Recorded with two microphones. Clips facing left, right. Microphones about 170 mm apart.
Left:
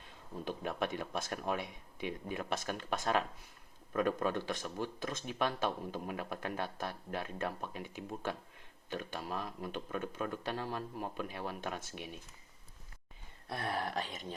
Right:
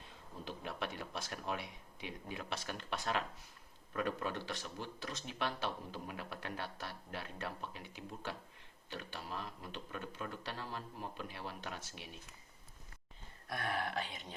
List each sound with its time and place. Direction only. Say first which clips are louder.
0.4 s speech: left 6 dB; 50° left (ahead or behind)
13.5 s speech: left 2 dB; 35° left (ahead or behind)